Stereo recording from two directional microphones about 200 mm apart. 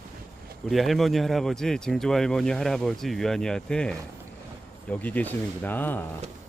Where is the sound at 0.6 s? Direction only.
Centre (ahead or behind).